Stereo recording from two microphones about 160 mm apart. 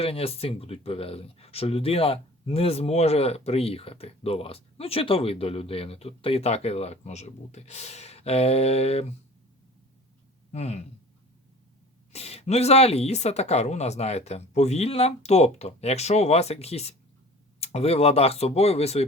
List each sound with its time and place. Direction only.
0.0 s speech: 35° left (ahead or behind)
10.5 s speech: 40° left (ahead or behind)
12.1 s speech: 40° left (ahead or behind)